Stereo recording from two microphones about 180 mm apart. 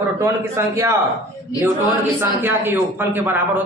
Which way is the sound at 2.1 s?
10° right (ahead or behind).